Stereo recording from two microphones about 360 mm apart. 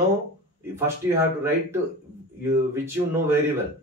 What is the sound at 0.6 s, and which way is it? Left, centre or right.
Speech, centre.